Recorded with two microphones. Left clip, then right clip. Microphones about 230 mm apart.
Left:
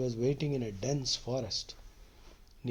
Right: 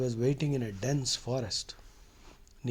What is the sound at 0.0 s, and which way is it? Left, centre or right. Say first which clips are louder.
Speech: right 1 dB; right.